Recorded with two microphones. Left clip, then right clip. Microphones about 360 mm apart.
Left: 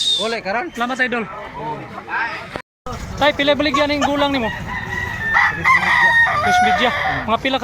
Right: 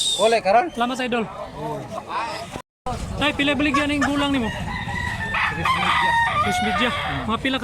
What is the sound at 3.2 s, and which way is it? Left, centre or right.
Speech, centre.